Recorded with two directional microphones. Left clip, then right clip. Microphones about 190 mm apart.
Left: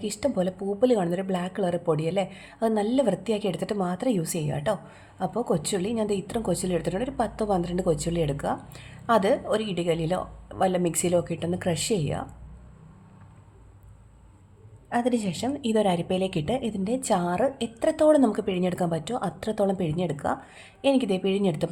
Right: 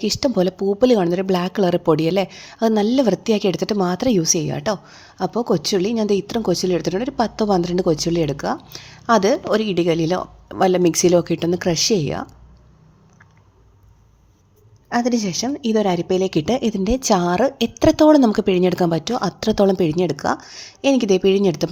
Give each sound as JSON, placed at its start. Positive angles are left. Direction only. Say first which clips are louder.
{"t": 0.0, "sound": "a woman's voice", "louder": "right 8 dB", "side_deg": -40}
{"t": 14.8, "sound": "a woman's voice", "louder": "right 6 dB", "side_deg": -35}